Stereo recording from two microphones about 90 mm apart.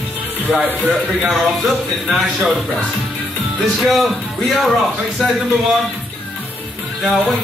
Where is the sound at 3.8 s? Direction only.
Centre (ahead or behind).